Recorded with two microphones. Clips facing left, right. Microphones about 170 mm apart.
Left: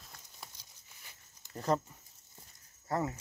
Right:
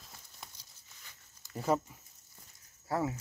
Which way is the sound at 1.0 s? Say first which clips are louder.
Left 1 dB; 20° left (ahead or behind).